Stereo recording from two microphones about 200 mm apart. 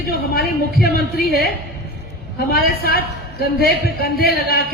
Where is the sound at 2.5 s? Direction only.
50° left (ahead or behind).